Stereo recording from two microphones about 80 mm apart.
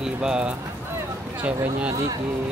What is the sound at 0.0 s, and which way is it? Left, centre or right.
Speech, centre.